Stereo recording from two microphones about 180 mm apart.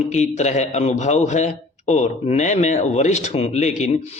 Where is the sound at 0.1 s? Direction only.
40° left (ahead or behind).